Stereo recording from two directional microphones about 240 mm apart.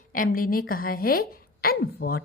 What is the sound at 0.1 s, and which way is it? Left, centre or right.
A woman's voice, left.